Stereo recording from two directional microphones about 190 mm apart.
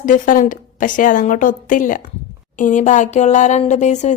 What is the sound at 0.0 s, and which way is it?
A woman's voice, 45° left (ahead or behind).